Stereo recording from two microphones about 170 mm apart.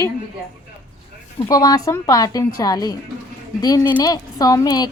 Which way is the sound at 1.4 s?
20° left (ahead or behind).